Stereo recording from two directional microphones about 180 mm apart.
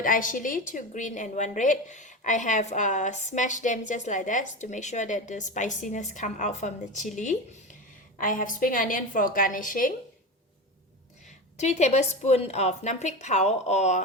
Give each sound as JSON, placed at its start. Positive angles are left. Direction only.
{"t": 0.0, "sound": "a woman's voice", "side_deg": 50}
{"t": 11.5, "sound": "a woman's voice", "side_deg": 40}